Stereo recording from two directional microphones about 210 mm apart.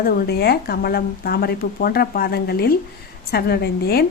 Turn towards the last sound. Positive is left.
turn(degrees=50)  # may be behind; listen again after turning